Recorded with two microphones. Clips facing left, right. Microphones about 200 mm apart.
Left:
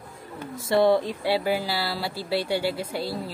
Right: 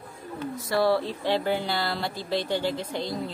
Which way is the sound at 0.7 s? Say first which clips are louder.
Left 4 dB; 20° left (ahead or behind).